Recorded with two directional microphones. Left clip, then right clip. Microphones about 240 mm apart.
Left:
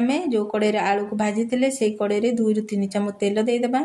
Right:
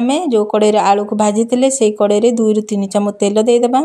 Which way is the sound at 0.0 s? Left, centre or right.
Right.